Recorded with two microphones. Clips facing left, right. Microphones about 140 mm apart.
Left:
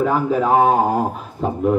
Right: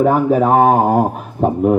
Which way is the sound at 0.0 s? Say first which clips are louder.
Right 5 dB; 55° right (ahead or behind).